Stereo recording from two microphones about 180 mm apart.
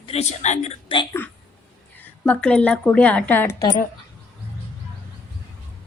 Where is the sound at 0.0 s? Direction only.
35° left (ahead or behind).